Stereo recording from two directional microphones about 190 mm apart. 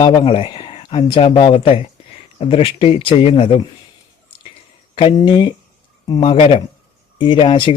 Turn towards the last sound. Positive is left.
turn(degrees=25)  # may be behind; listen again after turning